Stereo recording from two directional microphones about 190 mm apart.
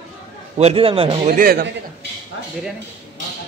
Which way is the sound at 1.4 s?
50° right (ahead or behind).